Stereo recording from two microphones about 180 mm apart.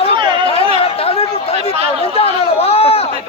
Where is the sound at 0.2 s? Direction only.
25° right (ahead or behind).